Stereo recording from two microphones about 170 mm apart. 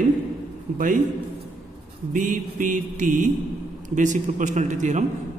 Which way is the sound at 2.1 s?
50° right (ahead or behind).